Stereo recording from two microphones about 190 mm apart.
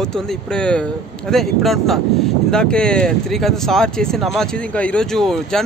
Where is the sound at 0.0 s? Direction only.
5° left (ahead or behind).